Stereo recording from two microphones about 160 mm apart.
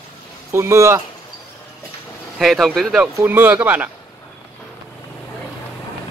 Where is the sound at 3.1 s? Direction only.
10° right (ahead or behind).